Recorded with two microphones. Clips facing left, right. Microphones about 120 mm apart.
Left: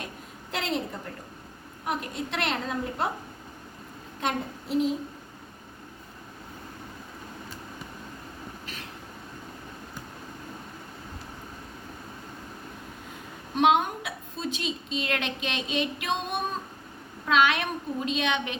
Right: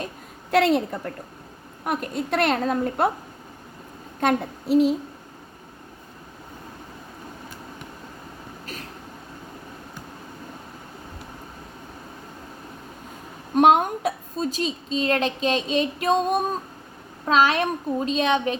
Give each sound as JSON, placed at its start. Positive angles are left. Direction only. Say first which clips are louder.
{"t": 0.5, "sound": "a woman's voice", "louder": "right 12 dB", "side_deg": -65}
{"t": 1.8, "sound": "a woman's voice", "louder": "right 5 dB", "side_deg": -50}
{"t": 4.2, "sound": "a woman's voice", "louder": "right 7 dB", "side_deg": -65}
{"t": 13.6, "sound": "a woman's voice", "louder": "right 5 dB", "side_deg": -45}